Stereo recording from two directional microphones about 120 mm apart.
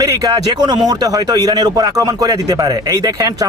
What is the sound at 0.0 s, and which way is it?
A man's voice, 30° right (ahead or behind).